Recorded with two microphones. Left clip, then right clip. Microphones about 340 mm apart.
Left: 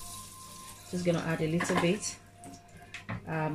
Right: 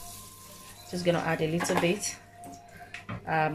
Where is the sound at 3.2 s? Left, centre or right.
Right.